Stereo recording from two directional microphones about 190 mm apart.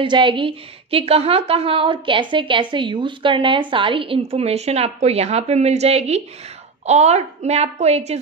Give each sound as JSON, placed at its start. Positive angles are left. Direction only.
{"t": 0.0, "sound": "a woman's voice", "side_deg": -25}